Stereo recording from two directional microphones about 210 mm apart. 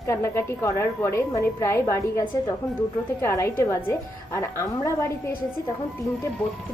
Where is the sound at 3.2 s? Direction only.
15° left (ahead or behind).